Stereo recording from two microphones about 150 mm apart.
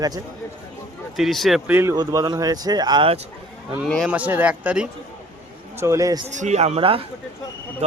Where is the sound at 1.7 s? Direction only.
15° right (ahead or behind); by 3.2 s 30° right (ahead or behind).